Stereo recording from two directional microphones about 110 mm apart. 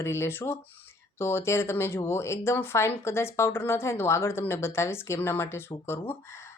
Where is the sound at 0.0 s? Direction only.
25° left (ahead or behind).